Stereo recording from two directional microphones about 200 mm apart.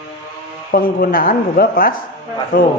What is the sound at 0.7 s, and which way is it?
A woman's voice, 45° left (ahead or behind).